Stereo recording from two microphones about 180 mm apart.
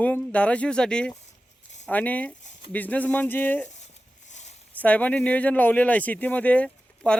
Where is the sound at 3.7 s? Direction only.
40° left (ahead or behind).